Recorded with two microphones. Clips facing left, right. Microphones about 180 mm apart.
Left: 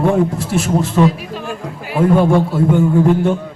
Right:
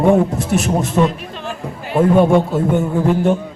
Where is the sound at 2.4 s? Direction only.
25° right (ahead or behind).